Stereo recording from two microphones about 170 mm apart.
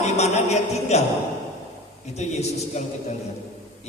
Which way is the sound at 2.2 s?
40° left (ahead or behind).